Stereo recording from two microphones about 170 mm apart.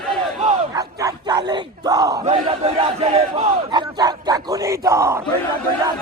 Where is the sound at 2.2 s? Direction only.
40° right (ahead or behind); by 5.2 s 15° right (ahead or behind).